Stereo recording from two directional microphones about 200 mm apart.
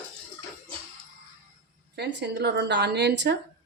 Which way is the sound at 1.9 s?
55° right (ahead or behind).